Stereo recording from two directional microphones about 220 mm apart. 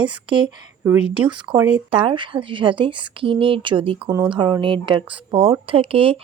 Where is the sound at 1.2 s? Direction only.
20° right (ahead or behind).